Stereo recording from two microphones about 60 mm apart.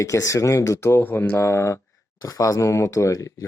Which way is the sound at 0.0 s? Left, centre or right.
Left.